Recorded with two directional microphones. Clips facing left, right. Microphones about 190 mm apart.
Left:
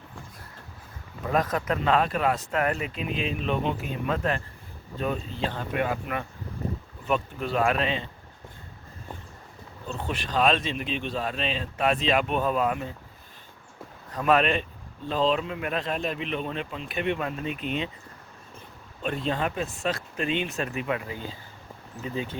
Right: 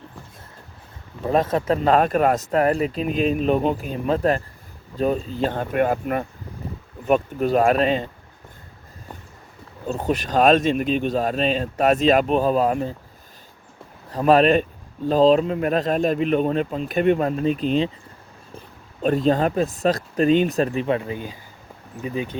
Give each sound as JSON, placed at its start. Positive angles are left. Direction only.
{"t": 1.2, "sound": "speech", "side_deg": -30}
{"t": 9.8, "sound": "speech", "side_deg": -40}
{"t": 14.1, "sound": "speech", "side_deg": -35}
{"t": 19.0, "sound": "speech", "side_deg": -40}
{"t": 22.0, "sound": "speech", "side_deg": -15}